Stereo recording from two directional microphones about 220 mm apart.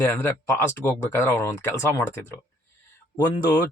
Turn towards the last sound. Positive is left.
turn(degrees=15)  # may be behind; listen again after turning